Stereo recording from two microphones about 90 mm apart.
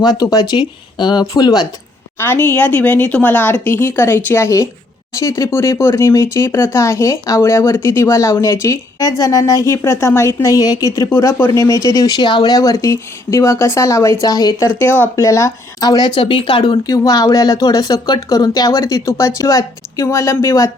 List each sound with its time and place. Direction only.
0.0 s speech: 50° left (ahead or behind)
2.1 s speech: 25° left (ahead or behind); by 14.7 s 45° left (ahead or behind)
15.1 s speech: 35° left (ahead or behind)
15.8 s speech: 50° left (ahead or behind)
16.2 s speech: 70° left (ahead or behind)
16.8 s speech: 40° left (ahead or behind)